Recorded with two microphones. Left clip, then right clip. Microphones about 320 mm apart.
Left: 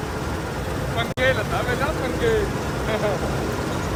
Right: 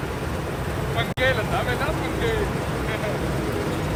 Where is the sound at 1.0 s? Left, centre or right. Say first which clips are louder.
Left 1 dB; centre.